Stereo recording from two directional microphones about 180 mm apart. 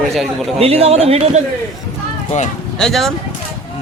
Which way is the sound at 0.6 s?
35° right (ahead or behind).